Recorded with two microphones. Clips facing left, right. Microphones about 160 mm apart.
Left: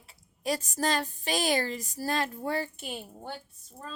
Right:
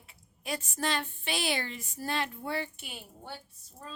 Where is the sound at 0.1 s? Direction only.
40° left (ahead or behind).